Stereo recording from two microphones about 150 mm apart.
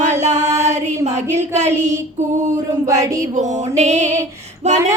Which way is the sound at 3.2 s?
50° right (ahead or behind).